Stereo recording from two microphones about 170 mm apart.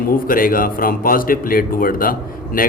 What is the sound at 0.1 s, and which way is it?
A man's voice, 55° left (ahead or behind).